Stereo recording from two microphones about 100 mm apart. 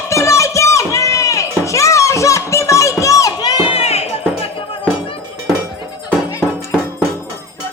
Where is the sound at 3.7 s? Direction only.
90° left.